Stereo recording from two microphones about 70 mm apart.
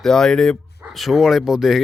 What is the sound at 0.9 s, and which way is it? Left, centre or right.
Speech, centre.